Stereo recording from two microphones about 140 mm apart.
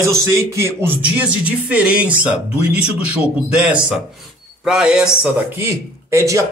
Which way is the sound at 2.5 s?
50° left (ahead or behind).